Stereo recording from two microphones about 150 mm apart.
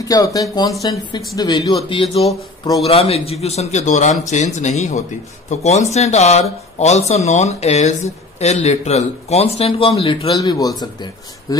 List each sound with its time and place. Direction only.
0.0 s speech: 25° left (ahead or behind); by 10.3 s 40° left (ahead or behind)
10.3 s speech: 25° left (ahead or behind)